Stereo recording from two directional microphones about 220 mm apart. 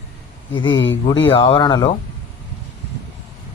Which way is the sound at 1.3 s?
20° left (ahead or behind).